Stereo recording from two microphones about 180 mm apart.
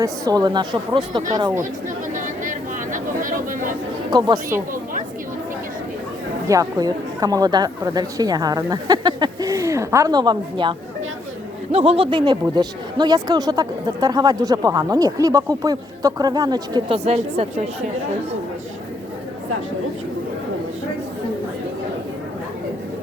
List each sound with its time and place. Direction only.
0.0 s speech: 20° right (ahead or behind)
2.1 s a sound: 45° right (ahead or behind)
6.5 s speech: 20° right (ahead or behind)
17.1 s a woman's voice: 35° right (ahead or behind)